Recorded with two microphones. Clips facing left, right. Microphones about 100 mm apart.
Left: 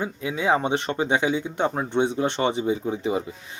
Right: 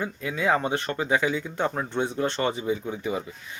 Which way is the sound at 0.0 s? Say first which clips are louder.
Left 1 dB; 20° left (ahead or behind).